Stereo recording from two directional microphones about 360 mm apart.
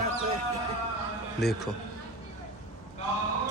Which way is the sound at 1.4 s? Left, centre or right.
Centre.